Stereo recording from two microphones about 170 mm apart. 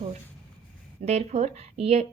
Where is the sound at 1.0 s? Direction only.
40° right (ahead or behind).